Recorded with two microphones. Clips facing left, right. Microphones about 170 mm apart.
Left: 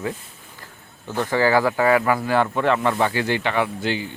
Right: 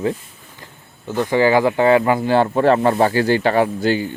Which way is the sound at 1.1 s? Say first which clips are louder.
Right 4 dB; 15° right (ahead or behind).